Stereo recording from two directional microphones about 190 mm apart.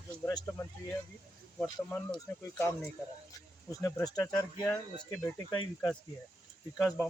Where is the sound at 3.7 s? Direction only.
15° left (ahead or behind).